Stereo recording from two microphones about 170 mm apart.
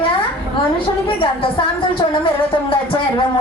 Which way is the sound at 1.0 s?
30° left (ahead or behind).